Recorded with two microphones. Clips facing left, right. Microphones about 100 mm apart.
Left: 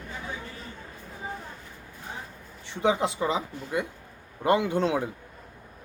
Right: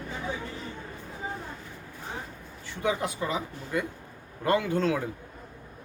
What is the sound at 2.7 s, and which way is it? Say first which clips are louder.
Speech: left 4 dB; 25° left (ahead or behind).